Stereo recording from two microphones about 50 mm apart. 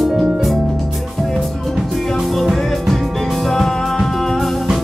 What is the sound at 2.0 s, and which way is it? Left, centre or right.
Music, centre.